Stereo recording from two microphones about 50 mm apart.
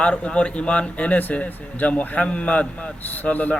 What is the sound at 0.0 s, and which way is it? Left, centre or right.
A man's voice, left.